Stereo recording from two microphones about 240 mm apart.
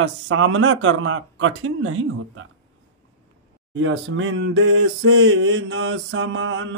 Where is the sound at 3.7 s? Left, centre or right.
Right.